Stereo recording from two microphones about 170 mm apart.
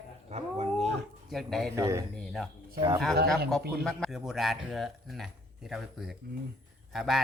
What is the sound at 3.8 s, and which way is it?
Speech, 5° left (ahead or behind).